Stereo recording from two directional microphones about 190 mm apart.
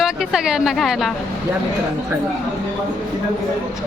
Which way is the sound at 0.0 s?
Centre (ahead or behind).